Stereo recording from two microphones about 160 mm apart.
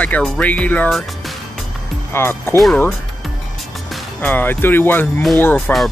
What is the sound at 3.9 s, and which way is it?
Speech, 10° left (ahead or behind).